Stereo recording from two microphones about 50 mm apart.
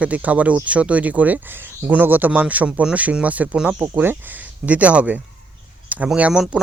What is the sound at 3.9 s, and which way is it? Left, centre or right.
Speech, right.